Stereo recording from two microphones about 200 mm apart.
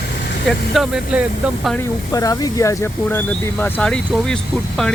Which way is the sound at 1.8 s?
15° left (ahead or behind).